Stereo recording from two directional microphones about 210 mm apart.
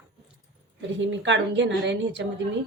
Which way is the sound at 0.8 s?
60° right (ahead or behind).